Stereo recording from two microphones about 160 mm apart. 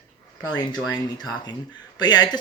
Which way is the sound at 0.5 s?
25° left (ahead or behind).